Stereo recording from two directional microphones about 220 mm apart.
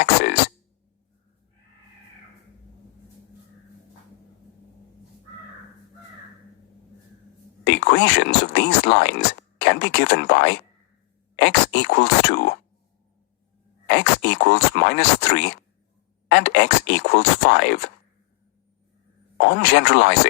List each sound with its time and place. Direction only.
0.0 s a sound: 55° left (ahead or behind)
7.6 s speech: 55° left (ahead or behind)
13.8 s speech: 55° left (ahead or behind)
19.4 s speech: 55° left (ahead or behind)